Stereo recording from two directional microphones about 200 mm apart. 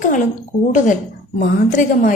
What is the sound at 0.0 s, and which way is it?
Speech, 40° left (ahead or behind).